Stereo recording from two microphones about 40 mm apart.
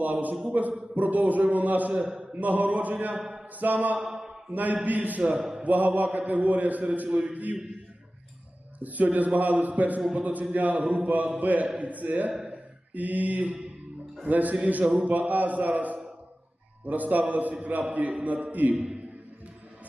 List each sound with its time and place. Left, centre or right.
0.0 s a man's voice: right
4.0 s a man's voice: centre
4.5 s a man's voice: right
5.4 s a sound: centre
5.6 s a man's voice: right
8.8 s a man's voice: right